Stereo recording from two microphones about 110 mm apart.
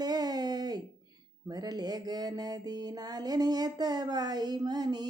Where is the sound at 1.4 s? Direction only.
35° right (ahead or behind).